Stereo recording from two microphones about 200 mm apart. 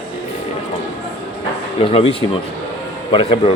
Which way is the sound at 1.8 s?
30° left (ahead or behind).